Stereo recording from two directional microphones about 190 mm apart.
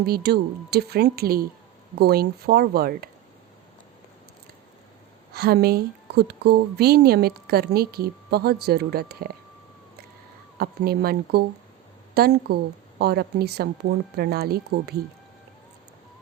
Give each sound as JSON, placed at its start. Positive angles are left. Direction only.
{"t": 0.0, "sound": "a woman's voice", "side_deg": -55}
{"t": 5.3, "sound": "a woman's voice", "side_deg": -55}
{"t": 10.6, "sound": "a woman's voice", "side_deg": -55}